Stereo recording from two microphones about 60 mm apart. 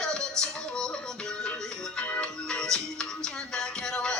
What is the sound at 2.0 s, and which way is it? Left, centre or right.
Music, left.